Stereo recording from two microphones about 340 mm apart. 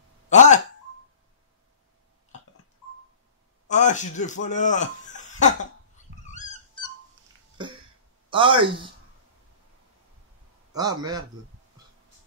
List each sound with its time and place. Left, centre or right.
0.3 s a sound: left
3.6 s speech: left
6.2 s dog: centre
8.3 s speech: centre
10.7 s a man's voice: centre